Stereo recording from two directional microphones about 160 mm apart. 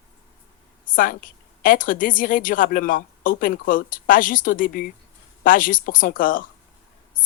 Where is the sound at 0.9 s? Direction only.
60° left (ahead or behind).